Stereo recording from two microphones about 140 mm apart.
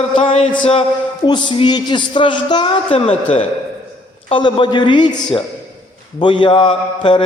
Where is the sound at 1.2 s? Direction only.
35° left (ahead or behind).